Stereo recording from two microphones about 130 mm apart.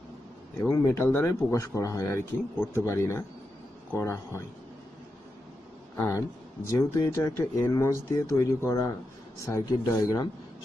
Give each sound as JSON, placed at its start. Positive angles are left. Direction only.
{"t": 0.6, "sound": "speech", "side_deg": 20}
{"t": 5.9, "sound": "speech", "side_deg": 20}